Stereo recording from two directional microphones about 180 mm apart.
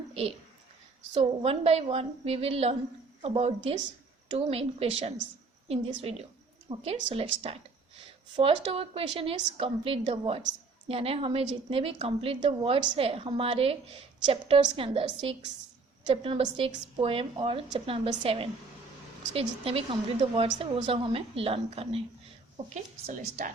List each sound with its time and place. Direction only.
0.1 s a sound: 35° right (ahead or behind)
1.1 s a woman's voice: 30° right (ahead or behind)
8.6 s a woman's voice: 30° right (ahead or behind)